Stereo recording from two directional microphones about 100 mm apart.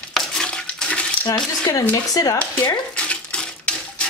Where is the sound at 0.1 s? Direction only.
5° left (ahead or behind).